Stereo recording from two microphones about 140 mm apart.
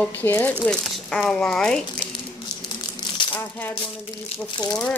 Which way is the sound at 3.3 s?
10° left (ahead or behind).